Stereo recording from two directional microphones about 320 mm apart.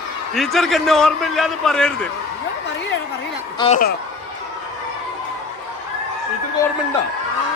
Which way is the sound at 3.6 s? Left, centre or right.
Left.